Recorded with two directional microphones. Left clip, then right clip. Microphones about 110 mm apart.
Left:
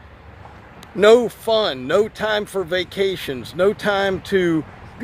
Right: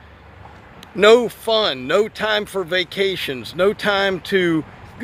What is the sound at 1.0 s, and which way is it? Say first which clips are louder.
Speech: even; 5° right (ahead or behind).